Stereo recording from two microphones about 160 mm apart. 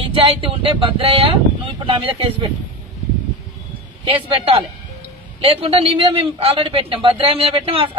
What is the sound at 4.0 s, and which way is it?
A man's voice, 30° right (ahead or behind).